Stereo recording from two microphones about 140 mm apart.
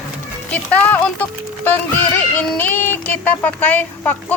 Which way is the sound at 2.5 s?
15° left (ahead or behind).